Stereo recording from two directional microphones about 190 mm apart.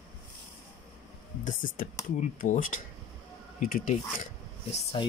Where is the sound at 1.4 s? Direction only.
45° left (ahead or behind).